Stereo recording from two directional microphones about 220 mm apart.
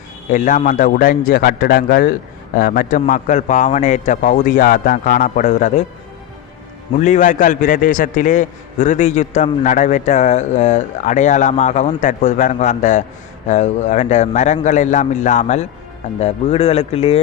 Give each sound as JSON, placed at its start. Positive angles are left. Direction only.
{"t": 0.3, "sound": "a man's voice", "side_deg": 35}
{"t": 7.0, "sound": "a man's voice", "side_deg": 35}